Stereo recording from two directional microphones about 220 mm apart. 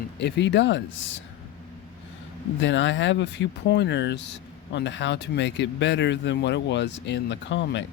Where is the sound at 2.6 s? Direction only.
55° left (ahead or behind).